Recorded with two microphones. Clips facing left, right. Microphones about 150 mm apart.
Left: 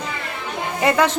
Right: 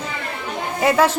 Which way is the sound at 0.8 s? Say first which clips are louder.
Right 1 dB; 5° right (ahead or behind).